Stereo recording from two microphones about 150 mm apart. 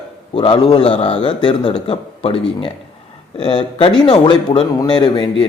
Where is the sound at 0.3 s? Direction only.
30° left (ahead or behind).